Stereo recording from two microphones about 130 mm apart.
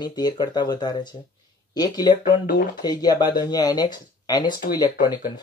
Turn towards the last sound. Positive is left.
turn(degrees=35)  # may be behind; listen again after turning